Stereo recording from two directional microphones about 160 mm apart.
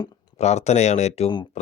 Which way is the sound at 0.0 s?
25° left (ahead or behind).